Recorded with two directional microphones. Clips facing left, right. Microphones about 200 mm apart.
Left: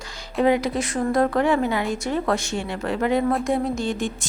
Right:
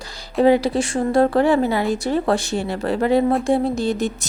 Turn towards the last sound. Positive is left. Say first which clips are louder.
# right 4 dB
turn(degrees=-40)  # may be behind; listen again after turning